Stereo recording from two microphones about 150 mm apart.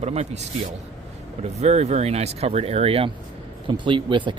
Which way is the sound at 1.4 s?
45° right (ahead or behind).